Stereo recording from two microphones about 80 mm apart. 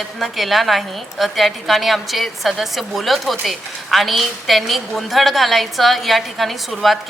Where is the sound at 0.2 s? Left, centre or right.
Centre.